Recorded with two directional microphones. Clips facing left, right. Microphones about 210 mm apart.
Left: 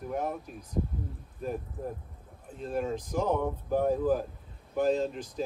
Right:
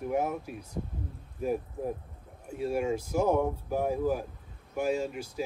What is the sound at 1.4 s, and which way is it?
Speech, 10° right (ahead or behind).